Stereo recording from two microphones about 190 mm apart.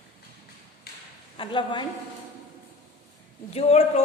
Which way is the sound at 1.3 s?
25° left (ahead or behind).